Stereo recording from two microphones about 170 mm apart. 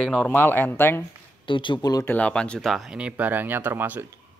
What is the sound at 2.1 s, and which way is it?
Speech, 5° left (ahead or behind).